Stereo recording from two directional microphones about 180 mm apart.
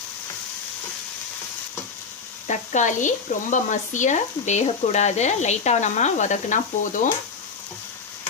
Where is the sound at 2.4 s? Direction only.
40° left (ahead or behind).